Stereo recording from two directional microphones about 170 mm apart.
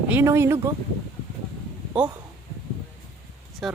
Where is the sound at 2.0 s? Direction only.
5° right (ahead or behind).